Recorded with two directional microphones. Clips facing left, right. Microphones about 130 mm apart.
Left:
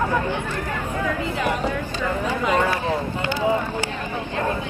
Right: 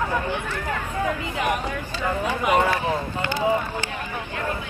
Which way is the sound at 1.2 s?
15° right (ahead or behind).